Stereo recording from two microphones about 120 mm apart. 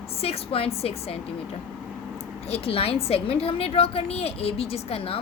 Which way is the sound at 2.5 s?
50° left (ahead or behind).